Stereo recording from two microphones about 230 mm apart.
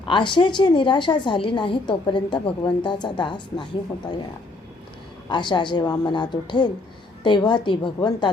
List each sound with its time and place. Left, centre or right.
0.1 s a woman's voice: centre
5.3 s a woman's voice: centre